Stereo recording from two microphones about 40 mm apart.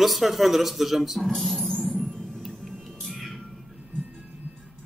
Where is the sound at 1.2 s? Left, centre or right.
Centre.